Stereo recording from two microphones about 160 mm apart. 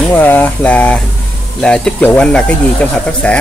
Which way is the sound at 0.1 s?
10° left (ahead or behind).